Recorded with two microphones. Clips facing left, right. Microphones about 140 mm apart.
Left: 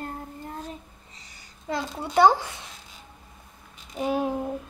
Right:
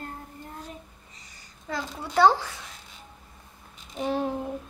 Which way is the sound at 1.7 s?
20° left (ahead or behind).